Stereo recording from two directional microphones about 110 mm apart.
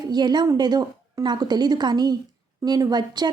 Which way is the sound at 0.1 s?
40° right (ahead or behind).